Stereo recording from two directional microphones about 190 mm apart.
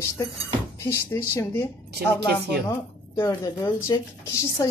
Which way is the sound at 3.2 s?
15° left (ahead or behind).